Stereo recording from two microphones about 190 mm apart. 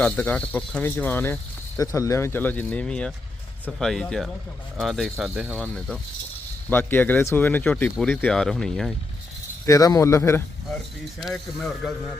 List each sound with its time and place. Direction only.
0.0 s speech: 5° left (ahead or behind)
6.7 s speech: 10° left (ahead or behind)
9.6 s speech: 20° left (ahead or behind)
11.2 s speech: centre (ahead or behind)